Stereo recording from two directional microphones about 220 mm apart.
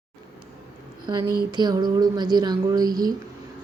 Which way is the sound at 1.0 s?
20° right (ahead or behind).